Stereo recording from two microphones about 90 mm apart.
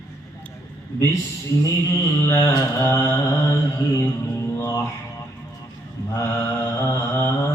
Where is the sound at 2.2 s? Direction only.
30° left (ahead or behind).